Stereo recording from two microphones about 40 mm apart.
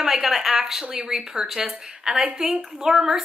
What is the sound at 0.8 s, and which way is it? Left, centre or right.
Speech, right.